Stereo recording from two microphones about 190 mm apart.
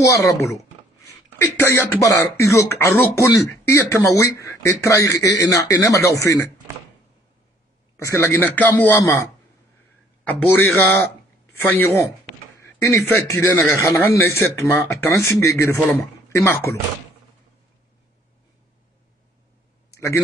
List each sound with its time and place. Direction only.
0.0 s a man's voice: 15° left (ahead or behind)
8.0 s a man's voice: 15° left (ahead or behind)
19.9 s a sound: 15° left (ahead or behind)